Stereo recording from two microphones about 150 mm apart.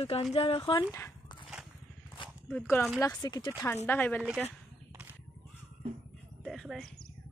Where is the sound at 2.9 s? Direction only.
25° left (ahead or behind).